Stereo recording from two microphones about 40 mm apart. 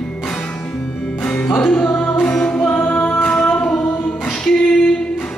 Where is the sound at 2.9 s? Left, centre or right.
Left.